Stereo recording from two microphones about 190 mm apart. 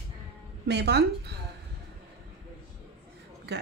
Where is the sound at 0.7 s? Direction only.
60° right (ahead or behind).